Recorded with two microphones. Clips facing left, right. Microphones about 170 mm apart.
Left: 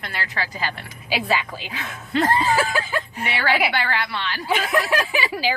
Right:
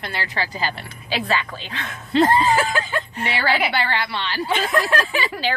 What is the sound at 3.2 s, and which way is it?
A woman's voice, 30° right (ahead or behind).